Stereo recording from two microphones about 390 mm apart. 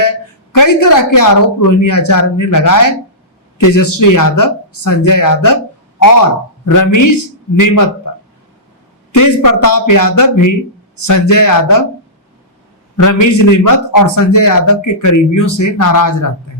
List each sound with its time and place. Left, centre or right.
0.5 s a woman's voice: left
6.7 s a woman's voice: left
9.1 s a woman's voice: left
13.0 s a woman's voice: left